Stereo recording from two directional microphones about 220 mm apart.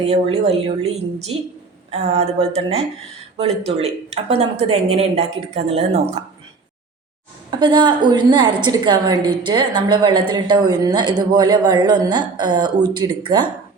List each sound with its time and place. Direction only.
0.0 s a woman's voice: 30° right (ahead or behind)
7.6 s a woman's voice: 20° right (ahead or behind)